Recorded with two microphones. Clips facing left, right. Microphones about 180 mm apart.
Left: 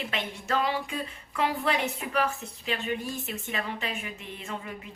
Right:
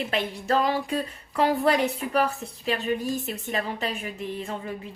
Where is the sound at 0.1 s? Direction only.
35° right (ahead or behind).